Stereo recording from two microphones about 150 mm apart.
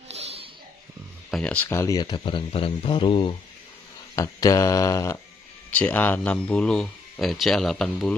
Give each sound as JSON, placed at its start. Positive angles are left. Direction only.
{"t": 0.1, "sound": "a sound", "side_deg": -45}
{"t": 1.3, "sound": "a man's voice", "side_deg": 10}
{"t": 4.1, "sound": "speech", "side_deg": 20}
{"t": 5.7, "sound": "speech", "side_deg": 10}